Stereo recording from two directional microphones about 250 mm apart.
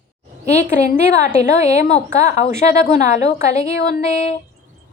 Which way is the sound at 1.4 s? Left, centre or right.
Left.